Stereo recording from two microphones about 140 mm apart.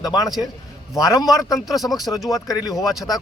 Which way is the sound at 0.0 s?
25° left (ahead or behind).